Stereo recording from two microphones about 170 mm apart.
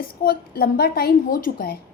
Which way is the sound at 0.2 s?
60° left (ahead or behind).